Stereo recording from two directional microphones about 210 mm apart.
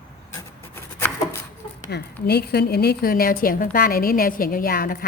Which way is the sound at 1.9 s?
50° left (ahead or behind).